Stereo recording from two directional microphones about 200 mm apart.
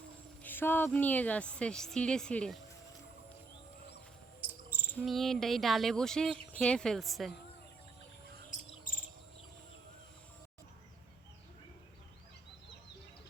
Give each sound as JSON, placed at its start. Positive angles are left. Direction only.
{"t": 0.4, "sound": "speech", "side_deg": 10}
{"t": 4.4, "sound": "cricket", "side_deg": -10}
{"t": 4.9, "sound": "speech", "side_deg": 0}
{"t": 8.4, "sound": "cricket", "side_deg": 45}